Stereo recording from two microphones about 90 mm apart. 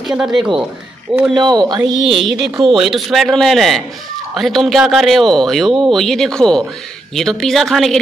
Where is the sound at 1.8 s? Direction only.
65° right (ahead or behind).